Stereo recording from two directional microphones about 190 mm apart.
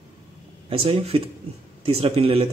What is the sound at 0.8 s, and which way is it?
A man's voice, 30° right (ahead or behind).